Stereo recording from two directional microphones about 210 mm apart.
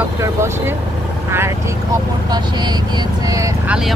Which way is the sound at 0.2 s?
15° right (ahead or behind).